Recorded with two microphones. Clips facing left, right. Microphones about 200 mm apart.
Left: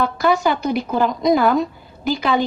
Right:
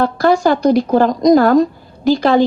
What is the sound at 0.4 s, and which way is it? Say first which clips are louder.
Speech: right 7 dB; 45° right (ahead or behind).